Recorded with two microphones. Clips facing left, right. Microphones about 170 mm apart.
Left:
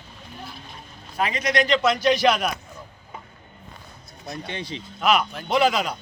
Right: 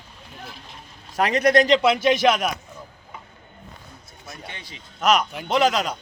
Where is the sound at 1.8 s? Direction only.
5° right (ahead or behind).